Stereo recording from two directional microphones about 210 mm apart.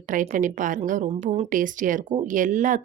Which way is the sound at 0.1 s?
40° right (ahead or behind).